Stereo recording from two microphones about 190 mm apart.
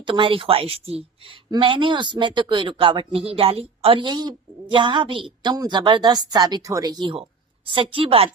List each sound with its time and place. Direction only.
0.0 s a woman's voice: 25° right (ahead or behind)